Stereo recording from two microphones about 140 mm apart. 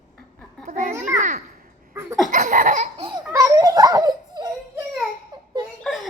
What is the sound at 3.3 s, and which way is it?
Baby cry, 25° right (ahead or behind).